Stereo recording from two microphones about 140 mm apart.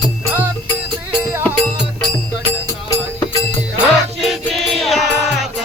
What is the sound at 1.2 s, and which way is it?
Music, 20° right (ahead or behind).